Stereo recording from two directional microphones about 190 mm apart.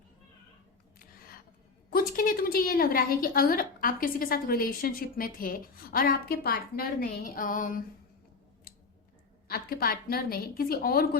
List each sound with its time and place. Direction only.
1.9 s a woman's voice: 50° left (ahead or behind)
9.5 s a woman's voice: 50° left (ahead or behind)